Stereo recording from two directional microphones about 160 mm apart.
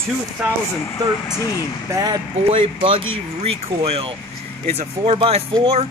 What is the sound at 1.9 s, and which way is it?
Speech, 25° right (ahead or behind).